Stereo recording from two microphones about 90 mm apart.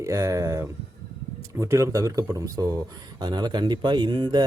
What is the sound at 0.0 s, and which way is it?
Speech, 35° right (ahead or behind).